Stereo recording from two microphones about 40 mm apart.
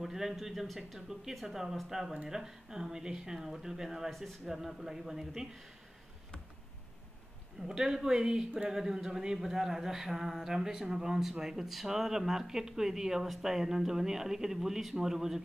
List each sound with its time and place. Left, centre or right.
0.0 s speech: centre
4.1 s speech: centre
4.7 s speech: centre
7.6 s speech: centre